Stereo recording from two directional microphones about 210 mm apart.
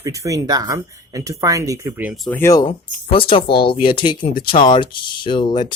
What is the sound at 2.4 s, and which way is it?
Speech, 15° left (ahead or behind).